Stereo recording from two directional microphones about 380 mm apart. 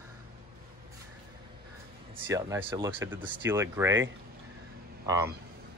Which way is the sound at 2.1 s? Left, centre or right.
Centre.